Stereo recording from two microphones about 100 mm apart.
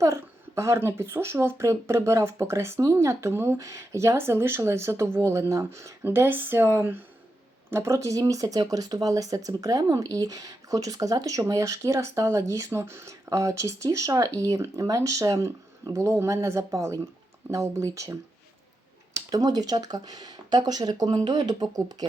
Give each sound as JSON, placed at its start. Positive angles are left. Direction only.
{"t": 0.0, "sound": "speech", "side_deg": -30}